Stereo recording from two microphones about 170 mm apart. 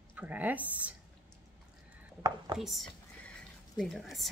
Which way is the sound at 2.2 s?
25° right (ahead or behind).